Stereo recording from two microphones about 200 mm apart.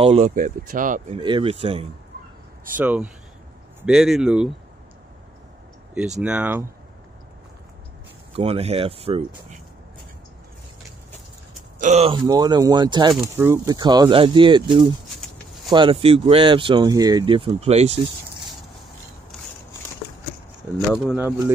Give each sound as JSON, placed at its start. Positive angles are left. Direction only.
{"t": 0.0, "sound": "speech", "side_deg": -30}
{"t": 0.3, "sound": "speech", "side_deg": -40}
{"t": 1.2, "sound": "speech", "side_deg": -25}
{"t": 2.8, "sound": "speech", "side_deg": -10}
{"t": 6.2, "sound": "speech", "side_deg": -5}
{"t": 8.4, "sound": "speech", "side_deg": -30}
{"t": 11.8, "sound": "speech", "side_deg": -30}
{"t": 12.3, "sound": "speech", "side_deg": -20}
{"t": 15.1, "sound": "a sound", "side_deg": 0}
{"t": 15.7, "sound": "speech", "side_deg": -25}
{"t": 19.3, "sound": "walk", "side_deg": 0}
{"t": 20.9, "sound": "speech", "side_deg": -5}